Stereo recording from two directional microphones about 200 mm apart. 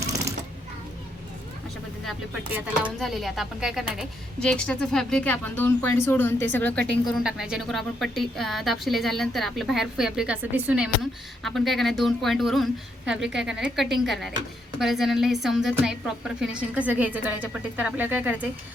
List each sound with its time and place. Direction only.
0.0 s sewing machine: 15° right (ahead or behind)
3.0 s a woman's voice: centre (ahead or behind)
7.1 s a woman's voice: centre (ahead or behind)